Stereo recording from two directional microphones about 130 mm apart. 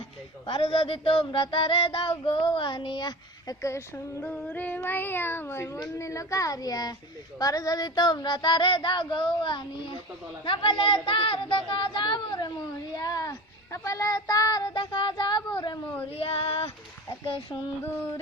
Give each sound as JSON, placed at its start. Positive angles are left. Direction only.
{"t": 0.4, "sound": "speech", "side_deg": 45}
{"t": 16.1, "sound": "female singing", "side_deg": 45}
{"t": 17.2, "sound": "speech", "side_deg": 40}